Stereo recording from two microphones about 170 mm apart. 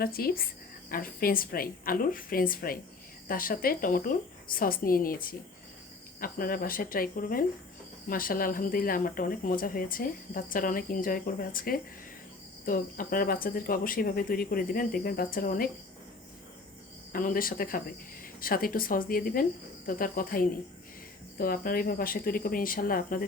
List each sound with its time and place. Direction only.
0.0 s speech: 60° left (ahead or behind)
17.1 s speech: 55° left (ahead or behind)